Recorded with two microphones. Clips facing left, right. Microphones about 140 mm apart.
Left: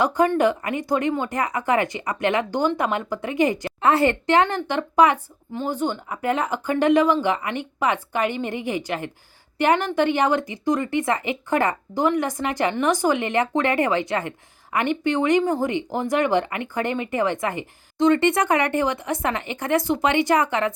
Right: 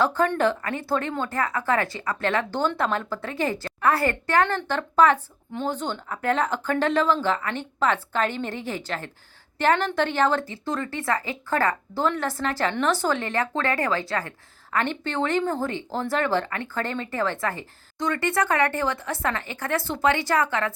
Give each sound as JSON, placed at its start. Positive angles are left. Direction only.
{"t": 0.0, "sound": "speech", "side_deg": 15}